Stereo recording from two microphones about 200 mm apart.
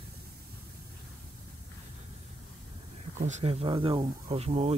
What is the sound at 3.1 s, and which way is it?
Speech, 35° right (ahead or behind).